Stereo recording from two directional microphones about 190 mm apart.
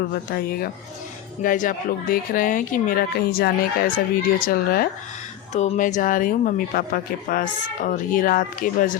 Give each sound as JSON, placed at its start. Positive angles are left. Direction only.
{"t": 0.1, "sound": "speech", "side_deg": 55}
{"t": 5.5, "sound": "speech", "side_deg": 40}